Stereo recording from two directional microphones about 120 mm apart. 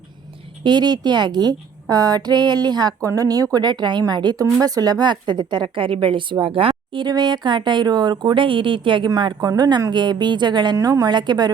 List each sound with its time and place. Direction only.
0.6 s speech: 35° right (ahead or behind)